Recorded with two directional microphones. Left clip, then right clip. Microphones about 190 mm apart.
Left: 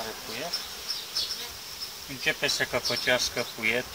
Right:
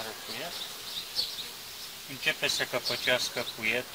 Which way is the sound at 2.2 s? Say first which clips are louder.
Left 2 dB; 15° right (ahead or behind).